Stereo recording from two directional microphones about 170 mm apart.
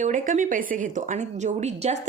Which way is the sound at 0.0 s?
50° right (ahead or behind).